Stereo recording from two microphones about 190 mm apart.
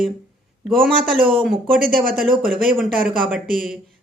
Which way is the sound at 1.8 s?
50° right (ahead or behind).